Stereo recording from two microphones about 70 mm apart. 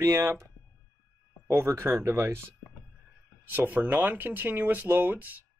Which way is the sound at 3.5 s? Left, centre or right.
Right.